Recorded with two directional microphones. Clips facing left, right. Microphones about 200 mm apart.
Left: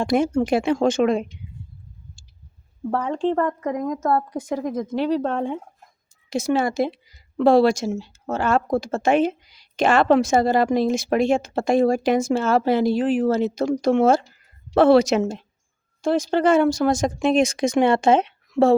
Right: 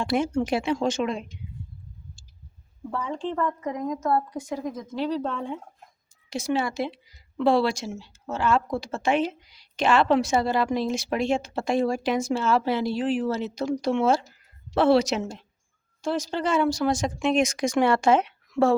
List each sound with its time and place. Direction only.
0.0 s speech: 45° left (ahead or behind)
2.9 s speech: 65° left (ahead or behind); by 18.7 s 25° left (ahead or behind)